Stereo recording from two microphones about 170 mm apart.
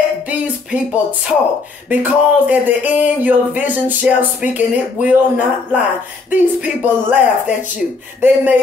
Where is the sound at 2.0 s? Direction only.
10° right (ahead or behind).